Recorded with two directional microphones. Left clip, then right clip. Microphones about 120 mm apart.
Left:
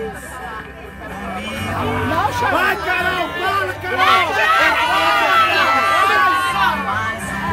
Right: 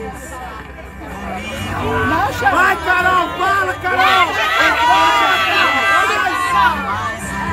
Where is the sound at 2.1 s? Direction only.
20° left (ahead or behind).